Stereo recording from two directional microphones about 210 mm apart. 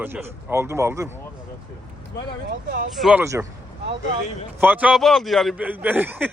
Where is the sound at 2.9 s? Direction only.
5° right (ahead or behind).